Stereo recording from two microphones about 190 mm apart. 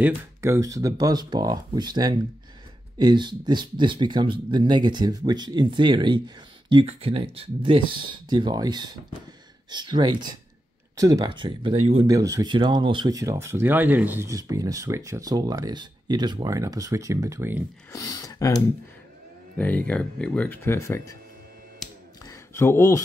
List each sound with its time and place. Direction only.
0.0 s speech: 15° right (ahead or behind)
17.9 s speech: 20° left (ahead or behind)
19.6 s speech: 5° left (ahead or behind)
22.2 s a sound: 15° left (ahead or behind)